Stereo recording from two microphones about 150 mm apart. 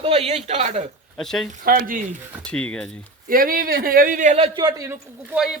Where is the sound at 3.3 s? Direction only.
70° right (ahead or behind).